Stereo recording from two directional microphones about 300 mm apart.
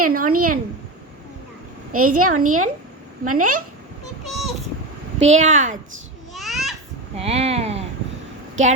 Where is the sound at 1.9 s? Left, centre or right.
Right.